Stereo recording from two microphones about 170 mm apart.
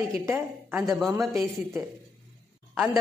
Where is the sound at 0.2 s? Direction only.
15° right (ahead or behind).